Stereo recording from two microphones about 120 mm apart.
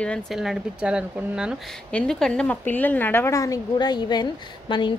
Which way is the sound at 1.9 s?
5° left (ahead or behind).